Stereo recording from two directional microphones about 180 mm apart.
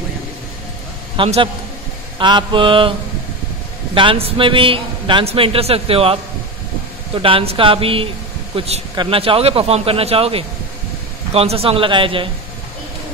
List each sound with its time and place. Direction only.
1.1 s a man's voice: 30° right (ahead or behind)
2.1 s mantra: 25° right (ahead or behind)
3.9 s a man's voice: 30° right (ahead or behind)
7.2 s a man's voice: 30° right (ahead or behind)